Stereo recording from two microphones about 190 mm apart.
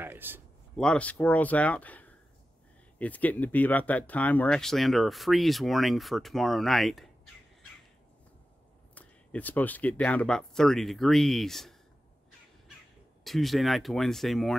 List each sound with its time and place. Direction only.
0.0 s speech: 10° right (ahead or behind)
0.7 s speech: 5° left (ahead or behind)
8.9 s speech: 10° left (ahead or behind)
13.2 s speech: centre (ahead or behind)